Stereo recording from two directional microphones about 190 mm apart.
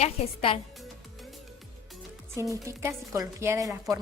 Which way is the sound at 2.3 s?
15° right (ahead or behind).